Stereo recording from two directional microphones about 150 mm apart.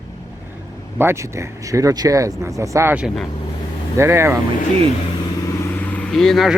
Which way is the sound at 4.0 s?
15° right (ahead or behind).